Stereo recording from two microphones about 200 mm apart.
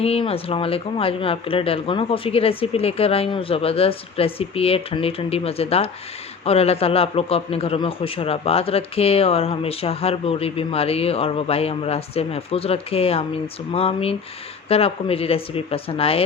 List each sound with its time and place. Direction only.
0.0 s a man's voice: 30° left (ahead or behind)